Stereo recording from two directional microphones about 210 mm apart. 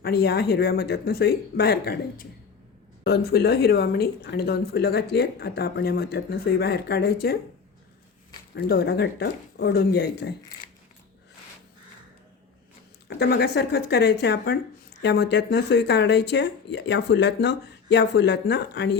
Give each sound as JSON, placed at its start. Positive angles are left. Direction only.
{"t": 0.0, "sound": "speech", "side_deg": 50}
{"t": 8.5, "sound": "speech", "side_deg": 50}
{"t": 13.1, "sound": "speech", "side_deg": 50}